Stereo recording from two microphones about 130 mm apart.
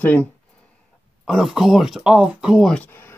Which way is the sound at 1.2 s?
5° right (ahead or behind).